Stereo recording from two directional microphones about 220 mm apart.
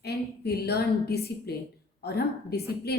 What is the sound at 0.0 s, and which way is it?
A woman's voice, 45° left (ahead or behind).